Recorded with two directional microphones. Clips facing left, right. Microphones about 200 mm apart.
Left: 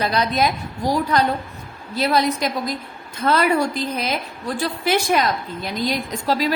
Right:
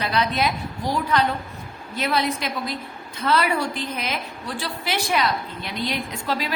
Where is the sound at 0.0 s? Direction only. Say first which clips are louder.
Left 3 dB; 40° left (ahead or behind).